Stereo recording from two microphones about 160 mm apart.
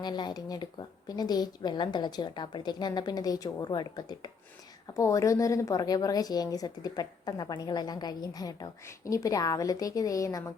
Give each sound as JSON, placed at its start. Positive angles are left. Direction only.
{"t": 0.0, "sound": "a woman's voice", "side_deg": 25}